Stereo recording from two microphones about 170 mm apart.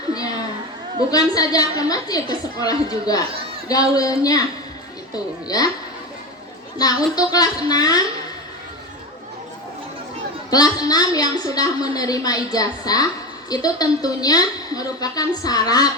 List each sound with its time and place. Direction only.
0.1 s children playing: 20° left (ahead or behind)
1.1 s a woman's voice: 20° left (ahead or behind)
6.8 s a woman's voice: 20° left (ahead or behind)
10.5 s a woman's voice: 20° left (ahead or behind)